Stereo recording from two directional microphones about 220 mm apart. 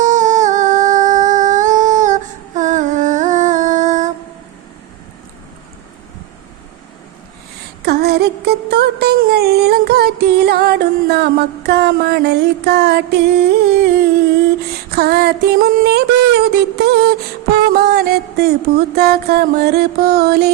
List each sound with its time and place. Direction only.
0.0 s humming: 35° right (ahead or behind)
7.8 s a sound: 50° right (ahead or behind)
17.5 s music: 45° right (ahead or behind)